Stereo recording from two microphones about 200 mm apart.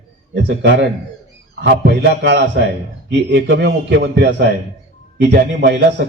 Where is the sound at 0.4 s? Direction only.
60° right (ahead or behind).